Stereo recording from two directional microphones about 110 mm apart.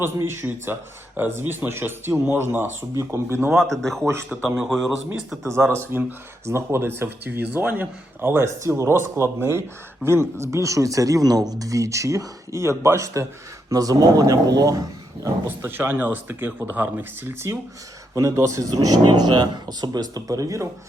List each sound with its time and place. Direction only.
0.0 s speech: 20° right (ahead or behind)
3.5 s speech: centre (ahead or behind)
4.3 s a man's voice: 10° right (ahead or behind)
5.4 s a man's voice: 25° right (ahead or behind)
15.4 s speech: 20° right (ahead or behind)